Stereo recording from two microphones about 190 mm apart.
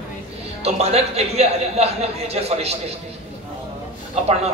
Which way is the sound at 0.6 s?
35° right (ahead or behind).